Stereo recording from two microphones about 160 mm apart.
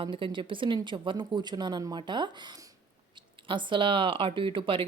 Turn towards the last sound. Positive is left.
turn(degrees=-30)  # may be behind; listen again after turning